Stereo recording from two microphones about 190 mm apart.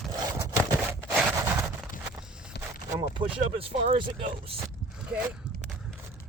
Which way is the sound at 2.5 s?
60° left (ahead or behind).